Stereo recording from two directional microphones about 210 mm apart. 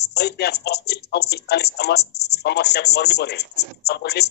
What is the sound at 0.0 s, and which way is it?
Speech, 50° left (ahead or behind).